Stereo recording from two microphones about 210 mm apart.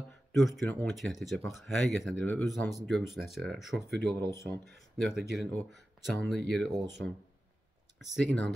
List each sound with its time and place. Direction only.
0.3 s speech: centre (ahead or behind)
3.7 s speech: 50° right (ahead or behind)
4.3 s speech: 15° left (ahead or behind)
4.9 s speech: centre (ahead or behind)
8.0 s speech: 5° left (ahead or behind)